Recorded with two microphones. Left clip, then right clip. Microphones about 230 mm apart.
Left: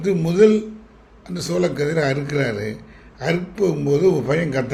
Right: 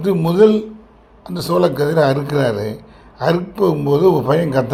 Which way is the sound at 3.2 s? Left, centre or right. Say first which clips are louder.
Right 5 dB; centre.